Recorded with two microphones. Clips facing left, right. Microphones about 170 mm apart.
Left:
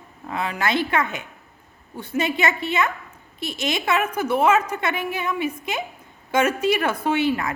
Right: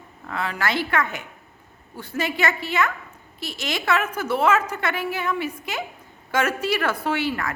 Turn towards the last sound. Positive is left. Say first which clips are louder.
# left 3 dB
turn(degrees=20)  # may be behind; listen again after turning